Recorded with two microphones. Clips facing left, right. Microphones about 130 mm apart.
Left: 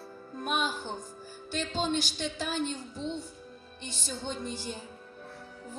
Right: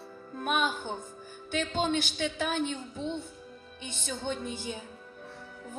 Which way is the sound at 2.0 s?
55° right (ahead or behind).